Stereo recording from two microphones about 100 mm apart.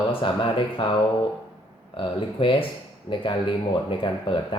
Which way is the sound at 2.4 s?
60° left (ahead or behind).